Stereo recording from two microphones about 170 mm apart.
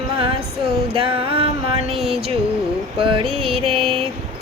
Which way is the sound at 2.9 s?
30° right (ahead or behind).